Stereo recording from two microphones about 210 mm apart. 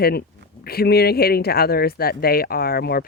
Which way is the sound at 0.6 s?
45° left (ahead or behind).